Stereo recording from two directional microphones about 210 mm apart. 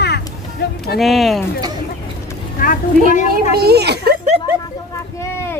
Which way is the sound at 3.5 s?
50° right (ahead or behind).